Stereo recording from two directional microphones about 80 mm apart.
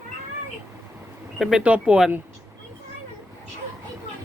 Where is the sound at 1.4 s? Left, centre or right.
Centre.